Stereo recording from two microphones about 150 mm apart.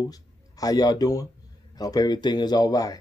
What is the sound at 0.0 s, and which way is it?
Speech, 25° left (ahead or behind).